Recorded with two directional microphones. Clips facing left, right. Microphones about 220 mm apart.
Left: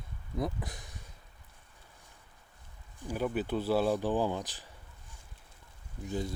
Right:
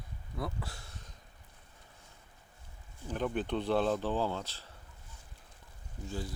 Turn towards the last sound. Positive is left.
turn(degrees=20)  # may be behind; listen again after turning